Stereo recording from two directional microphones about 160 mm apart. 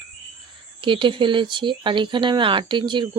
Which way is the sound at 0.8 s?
30° right (ahead or behind).